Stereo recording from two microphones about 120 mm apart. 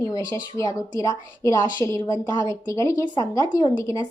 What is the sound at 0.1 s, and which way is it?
A woman's voice, 30° left (ahead or behind).